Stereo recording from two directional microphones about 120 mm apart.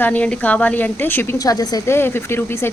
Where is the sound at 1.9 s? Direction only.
20° left (ahead or behind).